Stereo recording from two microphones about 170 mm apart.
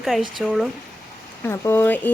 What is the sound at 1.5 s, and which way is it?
Speech, 15° left (ahead or behind).